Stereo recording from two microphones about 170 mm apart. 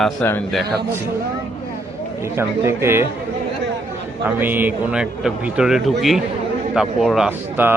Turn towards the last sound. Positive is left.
turn(degrees=-10)  # may be behind; listen again after turning